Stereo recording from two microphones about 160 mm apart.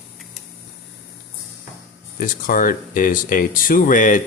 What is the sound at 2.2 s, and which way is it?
Speech, 60° left (ahead or behind).